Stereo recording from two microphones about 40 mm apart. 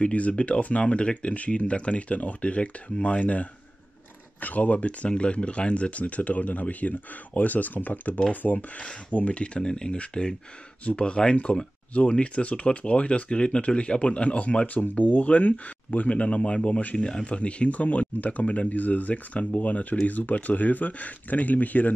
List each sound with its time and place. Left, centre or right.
0.0 s speech: left
9.1 s speech: left
14.8 s speech: left